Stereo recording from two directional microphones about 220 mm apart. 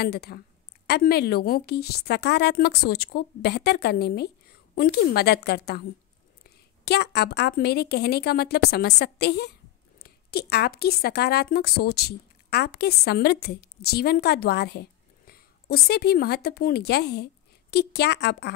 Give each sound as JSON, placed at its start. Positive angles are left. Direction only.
{"t": 0.0, "sound": "a woman's voice", "side_deg": 45}